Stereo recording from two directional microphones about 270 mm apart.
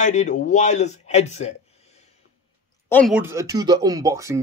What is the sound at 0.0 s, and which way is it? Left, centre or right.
Speech, left.